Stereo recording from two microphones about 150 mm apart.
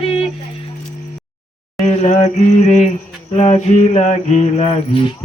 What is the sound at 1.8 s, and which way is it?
Mantra, 50° left (ahead or behind).